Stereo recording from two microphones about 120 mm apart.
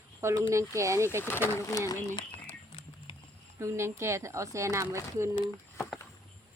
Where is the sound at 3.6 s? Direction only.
25° right (ahead or behind).